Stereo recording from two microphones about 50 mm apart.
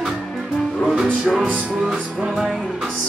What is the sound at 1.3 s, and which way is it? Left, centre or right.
Music, centre.